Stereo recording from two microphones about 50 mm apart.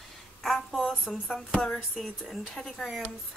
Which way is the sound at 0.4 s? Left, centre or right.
Centre.